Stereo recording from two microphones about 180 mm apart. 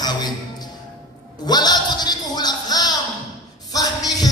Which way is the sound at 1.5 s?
25° left (ahead or behind).